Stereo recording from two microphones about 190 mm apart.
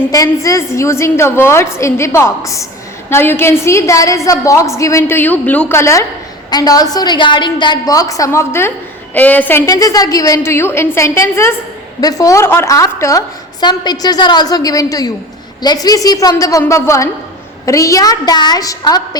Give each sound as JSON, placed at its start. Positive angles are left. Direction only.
{"t": 0.1, "sound": "a woman's voice", "side_deg": 15}